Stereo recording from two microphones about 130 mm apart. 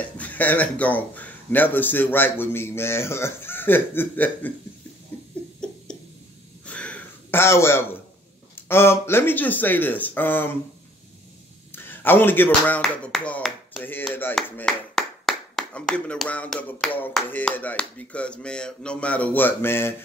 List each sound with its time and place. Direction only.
0.0 s speech: 10° left (ahead or behind)
6.6 s a sound: 10° left (ahead or behind)
8.5 s speech: 15° left (ahead or behind)
11.7 s speech: 15° left (ahead or behind)